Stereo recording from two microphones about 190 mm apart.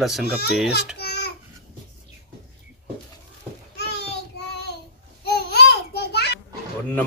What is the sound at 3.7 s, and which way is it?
Child singing, 60° left (ahead or behind).